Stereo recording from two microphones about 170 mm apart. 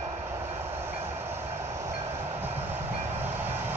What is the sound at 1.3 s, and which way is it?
Train, 15° right (ahead or behind).